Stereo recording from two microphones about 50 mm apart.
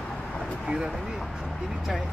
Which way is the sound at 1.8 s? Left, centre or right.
Centre.